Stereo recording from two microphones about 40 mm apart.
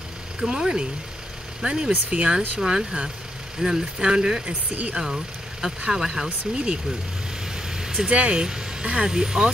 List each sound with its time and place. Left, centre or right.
0.4 s speech: centre
1.6 s speech: centre
2.0 s speech: right
2.6 s speech: centre
6.5 s speech: right
7.5 s vehicle: centre
8.1 s speech: right